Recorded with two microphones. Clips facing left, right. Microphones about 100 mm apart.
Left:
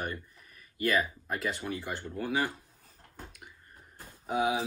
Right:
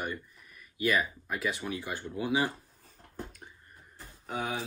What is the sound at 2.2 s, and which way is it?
Speech, 10° right (ahead or behind).